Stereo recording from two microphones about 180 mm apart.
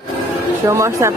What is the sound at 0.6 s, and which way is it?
Speech, 15° right (ahead or behind).